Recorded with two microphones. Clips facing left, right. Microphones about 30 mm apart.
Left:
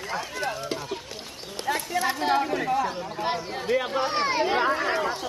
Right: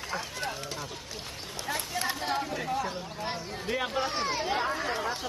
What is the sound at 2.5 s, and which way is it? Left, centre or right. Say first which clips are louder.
Speech: left 6 dB; left.